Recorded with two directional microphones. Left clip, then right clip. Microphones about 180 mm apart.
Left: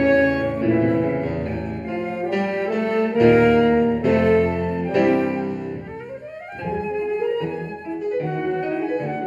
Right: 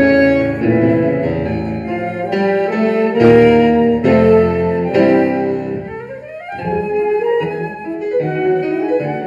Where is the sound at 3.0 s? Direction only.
10° left (ahead or behind).